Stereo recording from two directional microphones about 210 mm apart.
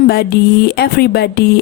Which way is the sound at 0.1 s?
50° left (ahead or behind).